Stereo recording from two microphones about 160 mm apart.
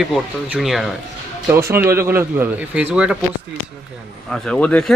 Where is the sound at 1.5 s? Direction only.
15° right (ahead or behind).